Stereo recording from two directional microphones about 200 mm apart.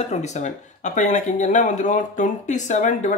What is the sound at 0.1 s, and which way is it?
Speech, 35° left (ahead or behind).